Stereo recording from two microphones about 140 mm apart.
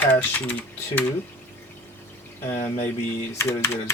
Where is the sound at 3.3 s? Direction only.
20° left (ahead or behind).